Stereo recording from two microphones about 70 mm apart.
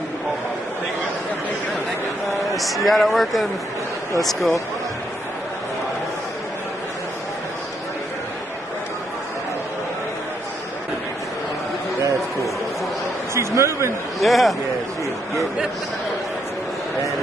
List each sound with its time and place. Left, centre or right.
2.5 s a man's voice: centre
13.3 s a man's voice: right
14.2 s a man's voice: centre